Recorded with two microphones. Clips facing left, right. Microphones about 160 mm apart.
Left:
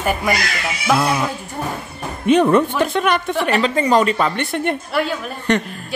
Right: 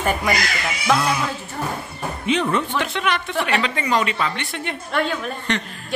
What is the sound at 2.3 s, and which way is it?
A woman's voice, 50° left (ahead or behind).